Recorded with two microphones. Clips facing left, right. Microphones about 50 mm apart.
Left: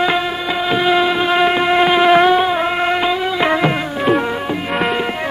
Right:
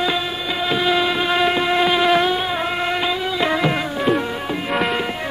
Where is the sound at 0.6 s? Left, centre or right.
Left.